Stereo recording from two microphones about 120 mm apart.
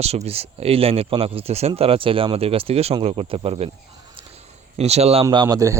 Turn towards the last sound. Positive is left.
turn(degrees=-25)  # may be behind; listen again after turning